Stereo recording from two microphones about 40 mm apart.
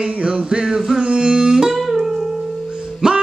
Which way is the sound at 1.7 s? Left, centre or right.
Centre.